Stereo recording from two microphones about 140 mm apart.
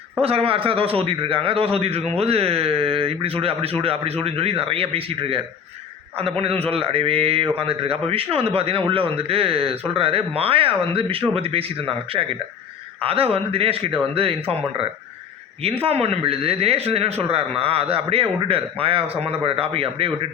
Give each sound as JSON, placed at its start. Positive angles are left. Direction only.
{"t": 0.2, "sound": "a man's voice", "side_deg": -45}
{"t": 15.6, "sound": "a man's voice", "side_deg": -45}